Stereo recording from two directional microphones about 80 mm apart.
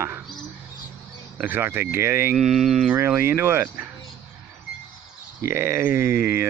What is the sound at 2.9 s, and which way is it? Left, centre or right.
Speech, right.